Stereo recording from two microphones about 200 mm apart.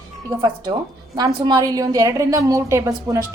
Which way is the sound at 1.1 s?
20° right (ahead or behind).